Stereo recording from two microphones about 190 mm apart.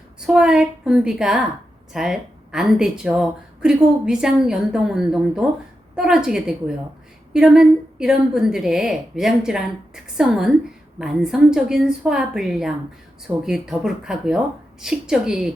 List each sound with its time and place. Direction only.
0.3 s a woman's voice: 5° right (ahead or behind)